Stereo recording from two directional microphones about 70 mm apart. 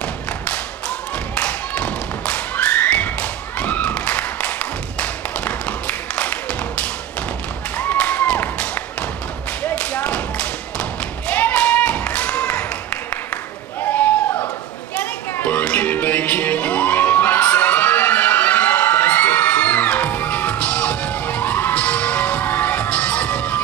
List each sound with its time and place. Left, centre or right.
0.0 s thump: centre
15.4 s music: left